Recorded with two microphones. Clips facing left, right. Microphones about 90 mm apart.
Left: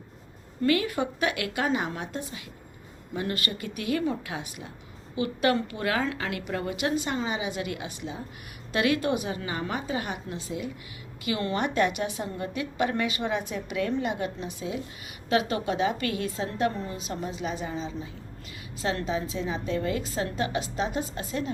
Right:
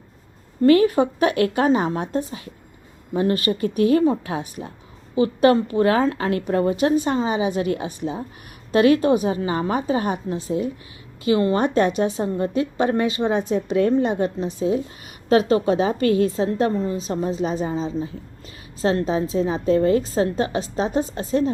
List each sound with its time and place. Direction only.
0.6 s a woman's voice: 35° right (ahead or behind)